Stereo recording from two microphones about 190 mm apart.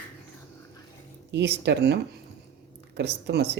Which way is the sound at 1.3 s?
65° right (ahead or behind).